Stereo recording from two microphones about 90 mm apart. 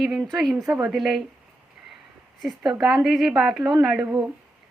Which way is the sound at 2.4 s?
Centre (ahead or behind).